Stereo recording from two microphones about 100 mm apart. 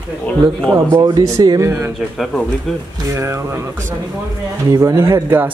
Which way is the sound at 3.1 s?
25° right (ahead or behind).